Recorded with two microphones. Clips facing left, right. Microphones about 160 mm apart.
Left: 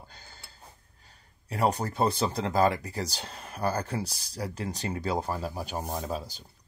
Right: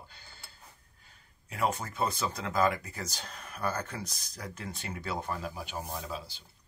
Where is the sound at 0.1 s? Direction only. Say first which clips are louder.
Left 4 dB; 45° left (ahead or behind).